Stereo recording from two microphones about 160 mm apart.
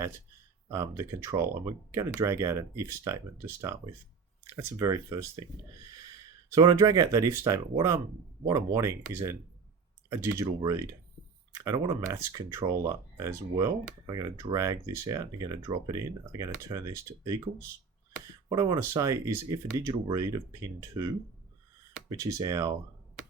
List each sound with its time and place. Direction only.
0.7 s speech: 20° right (ahead or behind)
6.5 s speech: 20° right (ahead or behind)
22.1 s speech: 20° right (ahead or behind)